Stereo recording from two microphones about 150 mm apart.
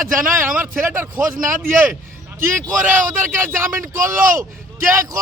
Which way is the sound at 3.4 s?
20° right (ahead or behind).